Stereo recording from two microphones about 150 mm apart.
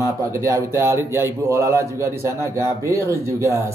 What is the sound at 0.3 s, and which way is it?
A man's voice, 20° right (ahead or behind).